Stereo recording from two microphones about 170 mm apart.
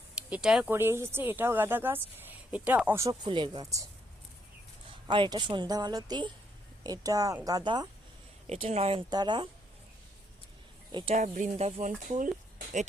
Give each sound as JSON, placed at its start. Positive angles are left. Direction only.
{"t": 0.2, "sound": "speech", "side_deg": -5}
{"t": 3.2, "sound": "a woman's voice", "side_deg": -30}
{"t": 4.9, "sound": "a woman's voice", "side_deg": -30}
{"t": 8.4, "sound": "speech", "side_deg": -35}
{"t": 10.9, "sound": "speech", "side_deg": -30}
{"t": 11.2, "sound": "speech", "side_deg": -45}